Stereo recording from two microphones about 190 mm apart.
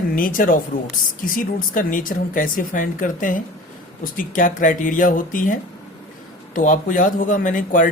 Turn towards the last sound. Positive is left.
turn(degrees=45)  # may be behind; listen again after turning